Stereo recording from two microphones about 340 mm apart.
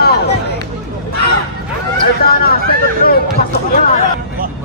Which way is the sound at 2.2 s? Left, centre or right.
Left.